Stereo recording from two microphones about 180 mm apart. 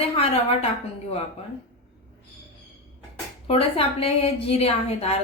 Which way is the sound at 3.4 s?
30° left (ahead or behind).